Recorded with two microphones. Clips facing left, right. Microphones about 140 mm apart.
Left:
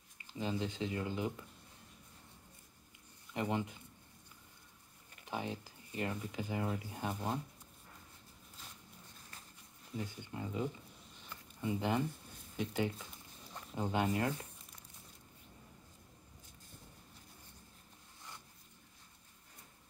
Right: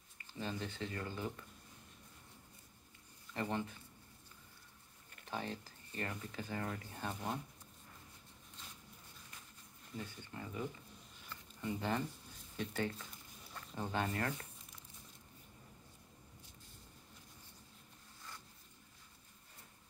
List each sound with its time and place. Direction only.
0.2 s speech: 15° left (ahead or behind)
3.3 s speech: 15° left (ahead or behind)
5.1 s speech: 15° left (ahead or behind)
9.9 s speech: 15° left (ahead or behind)
11.2 s a sound: 15° left (ahead or behind)
12.5 s speech: 15° left (ahead or behind)